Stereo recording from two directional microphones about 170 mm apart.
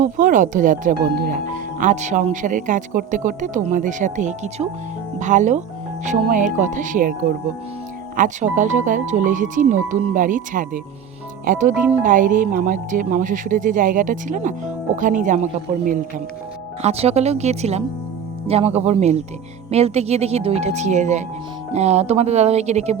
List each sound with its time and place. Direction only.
0.0 s speech: 50° right (ahead or behind)
16.8 s speech: 35° right (ahead or behind)